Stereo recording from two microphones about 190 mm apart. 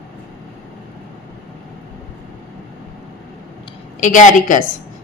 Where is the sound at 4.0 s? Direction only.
40° left (ahead or behind).